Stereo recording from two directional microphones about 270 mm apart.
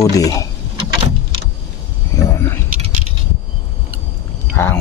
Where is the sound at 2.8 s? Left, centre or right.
Right.